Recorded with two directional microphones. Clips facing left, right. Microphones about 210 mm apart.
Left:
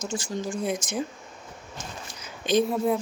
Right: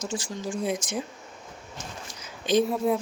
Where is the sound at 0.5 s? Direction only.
Centre (ahead or behind).